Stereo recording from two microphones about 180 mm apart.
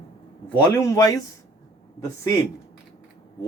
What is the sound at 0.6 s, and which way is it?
Speech, 15° left (ahead or behind).